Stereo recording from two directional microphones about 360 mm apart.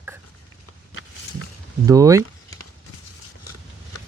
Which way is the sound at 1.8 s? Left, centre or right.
Centre.